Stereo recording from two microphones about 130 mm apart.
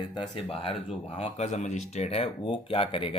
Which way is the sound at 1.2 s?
60° left (ahead or behind).